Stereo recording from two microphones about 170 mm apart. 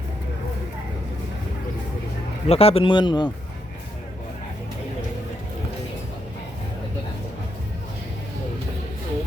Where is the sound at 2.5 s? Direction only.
35° left (ahead or behind).